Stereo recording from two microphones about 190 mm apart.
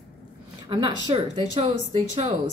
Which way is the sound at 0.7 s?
25° right (ahead or behind).